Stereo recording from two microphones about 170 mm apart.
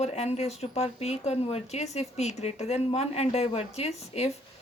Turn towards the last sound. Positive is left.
turn(degrees=40)  # may be behind; listen again after turning